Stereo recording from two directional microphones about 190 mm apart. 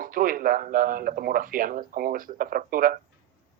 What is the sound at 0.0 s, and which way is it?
Speech, 45° right (ahead or behind).